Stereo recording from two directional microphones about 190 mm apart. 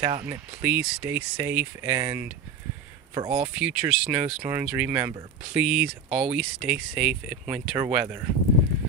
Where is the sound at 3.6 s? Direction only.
5° right (ahead or behind).